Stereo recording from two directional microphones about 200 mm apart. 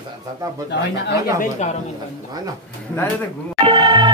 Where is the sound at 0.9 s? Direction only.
55° left (ahead or behind).